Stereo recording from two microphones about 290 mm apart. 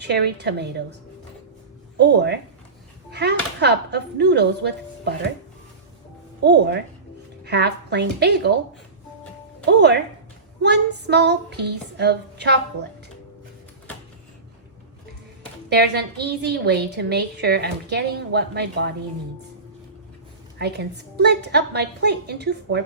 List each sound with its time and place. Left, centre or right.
0.0 s a woman's voice: right
2.0 s a woman's voice: right
3.1 s a sound: right
3.6 s a woman's voice: right
6.4 s a woman's voice: right
9.6 s a woman's voice: right
15.7 s a woman's voice: right
20.6 s a woman's voice: right